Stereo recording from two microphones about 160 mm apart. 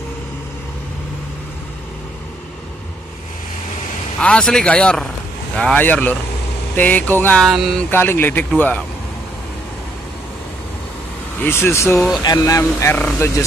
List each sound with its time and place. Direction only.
4.2 s speech: 5° left (ahead or behind)
7.4 s speech: centre (ahead or behind)
7.9 s speech: 15° left (ahead or behind)
11.4 s speech: 15° left (ahead or behind)